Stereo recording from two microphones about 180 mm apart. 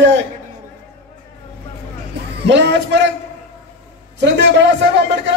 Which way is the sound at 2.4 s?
75° right (ahead or behind).